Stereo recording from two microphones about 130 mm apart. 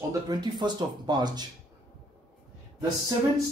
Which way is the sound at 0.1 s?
35° right (ahead or behind).